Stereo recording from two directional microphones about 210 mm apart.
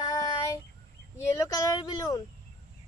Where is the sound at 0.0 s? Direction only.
15° left (ahead or behind).